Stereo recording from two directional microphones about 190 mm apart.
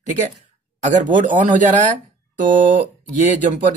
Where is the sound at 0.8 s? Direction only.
40° right (ahead or behind).